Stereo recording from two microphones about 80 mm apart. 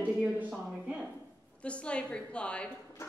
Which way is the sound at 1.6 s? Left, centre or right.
Centre.